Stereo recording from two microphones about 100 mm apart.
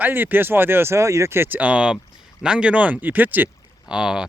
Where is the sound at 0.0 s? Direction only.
20° right (ahead or behind).